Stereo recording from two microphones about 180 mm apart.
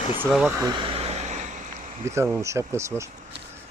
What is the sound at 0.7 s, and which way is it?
Vehicle, 30° right (ahead or behind).